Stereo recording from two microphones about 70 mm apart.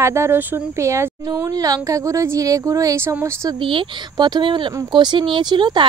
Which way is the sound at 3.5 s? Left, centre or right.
Right.